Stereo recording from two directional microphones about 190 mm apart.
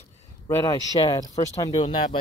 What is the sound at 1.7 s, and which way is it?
Speech, 30° left (ahead or behind).